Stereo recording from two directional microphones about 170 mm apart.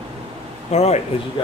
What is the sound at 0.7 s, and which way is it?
Speech, 40° left (ahead or behind).